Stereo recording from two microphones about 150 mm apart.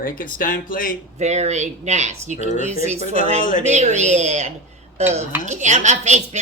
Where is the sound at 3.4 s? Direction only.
60° left (ahead or behind).